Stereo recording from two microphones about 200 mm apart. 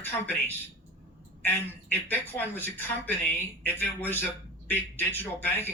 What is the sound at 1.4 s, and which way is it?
Speech, 10° left (ahead or behind).